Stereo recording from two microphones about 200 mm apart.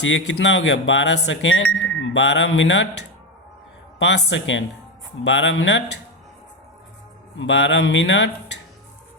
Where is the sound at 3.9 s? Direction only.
60° left (ahead or behind).